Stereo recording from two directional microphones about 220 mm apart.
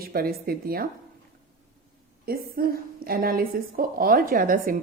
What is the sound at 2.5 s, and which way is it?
A woman's voice, 40° right (ahead or behind).